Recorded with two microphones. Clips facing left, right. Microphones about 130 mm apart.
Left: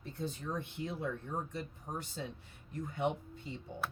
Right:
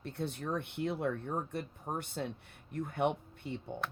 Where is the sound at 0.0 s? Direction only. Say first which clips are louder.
Right 3 dB; 65° right (ahead or behind).